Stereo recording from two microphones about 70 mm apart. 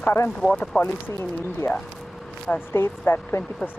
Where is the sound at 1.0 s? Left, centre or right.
Left.